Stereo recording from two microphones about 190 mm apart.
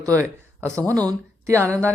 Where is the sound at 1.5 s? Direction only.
15° right (ahead or behind).